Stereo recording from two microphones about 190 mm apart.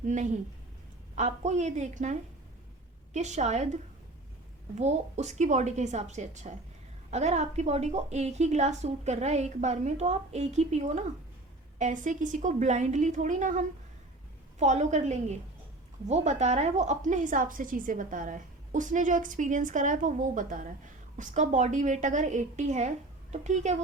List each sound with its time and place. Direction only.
0.0 s a woman's voice: 40° right (ahead or behind)
4.7 s a woman's voice: 35° right (ahead or behind)